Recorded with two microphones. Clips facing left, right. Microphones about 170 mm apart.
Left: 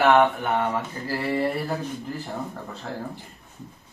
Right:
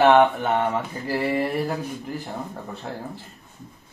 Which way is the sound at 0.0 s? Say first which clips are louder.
Right 2 dB; 25° right (ahead or behind).